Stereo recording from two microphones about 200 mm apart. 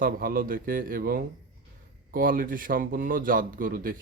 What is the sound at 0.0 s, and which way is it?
Speech, 45° right (ahead or behind).